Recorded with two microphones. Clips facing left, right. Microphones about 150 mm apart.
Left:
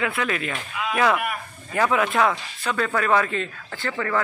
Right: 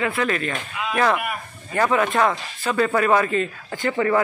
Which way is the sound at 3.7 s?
20° right (ahead or behind).